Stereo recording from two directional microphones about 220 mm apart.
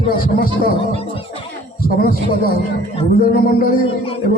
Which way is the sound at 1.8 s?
40° left (ahead or behind).